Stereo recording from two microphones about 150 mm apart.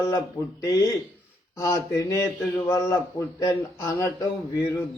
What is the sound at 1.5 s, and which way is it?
A man's voice, 20° left (ahead or behind).